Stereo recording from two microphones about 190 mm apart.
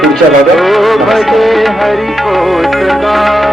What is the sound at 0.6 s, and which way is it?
Music, centre (ahead or behind).